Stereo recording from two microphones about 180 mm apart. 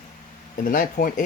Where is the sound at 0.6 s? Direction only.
50° left (ahead or behind).